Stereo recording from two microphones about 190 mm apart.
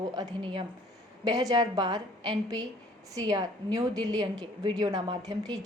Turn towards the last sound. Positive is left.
turn(degrees=-20)  # may be behind; listen again after turning